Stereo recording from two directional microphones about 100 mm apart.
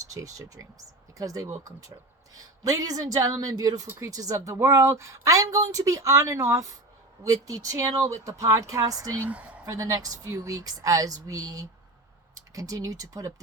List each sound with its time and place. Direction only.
0.0 s speech: 35° right (ahead or behind)
9.2 s speech: 15° right (ahead or behind)
9.6 s speech: 35° right (ahead or behind)